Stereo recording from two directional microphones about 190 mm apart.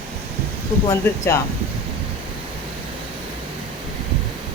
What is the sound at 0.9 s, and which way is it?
Speech, 15° left (ahead or behind).